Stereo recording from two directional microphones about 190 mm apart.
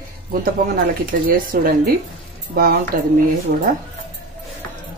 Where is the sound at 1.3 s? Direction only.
50° right (ahead or behind).